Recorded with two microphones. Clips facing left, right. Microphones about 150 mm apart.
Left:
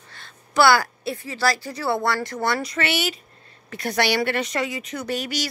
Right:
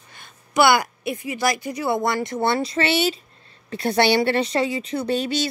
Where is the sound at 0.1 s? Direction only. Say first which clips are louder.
Right 1 dB; 20° right (ahead or behind).